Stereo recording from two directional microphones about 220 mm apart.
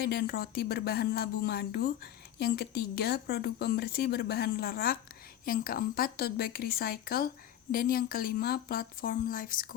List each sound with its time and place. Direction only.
0.0 s speech: 45° left (ahead or behind)